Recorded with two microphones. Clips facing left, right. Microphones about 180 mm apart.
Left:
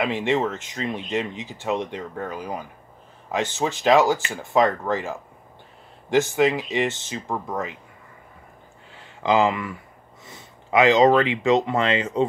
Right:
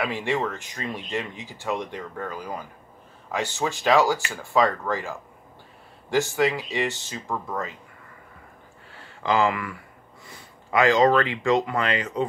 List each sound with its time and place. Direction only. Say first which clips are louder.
0.0 s speech: left 4 dB; 20° left (ahead or behind)
8.9 s a sound: left 3 dB; 20° left (ahead or behind)
10.2 s speech: left 2 dB; 20° left (ahead or behind)